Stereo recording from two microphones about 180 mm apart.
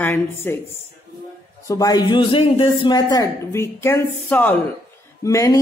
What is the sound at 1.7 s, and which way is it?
A woman's voice, 20° left (ahead or behind).